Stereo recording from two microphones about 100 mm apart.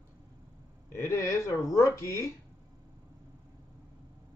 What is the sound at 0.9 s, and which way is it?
Speech, 30° left (ahead or behind).